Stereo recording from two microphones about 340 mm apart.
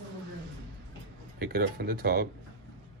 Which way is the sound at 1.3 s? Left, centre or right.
Right.